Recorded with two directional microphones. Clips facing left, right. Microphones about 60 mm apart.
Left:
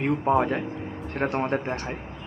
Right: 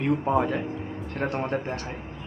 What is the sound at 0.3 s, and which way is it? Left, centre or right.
A man's voice, left.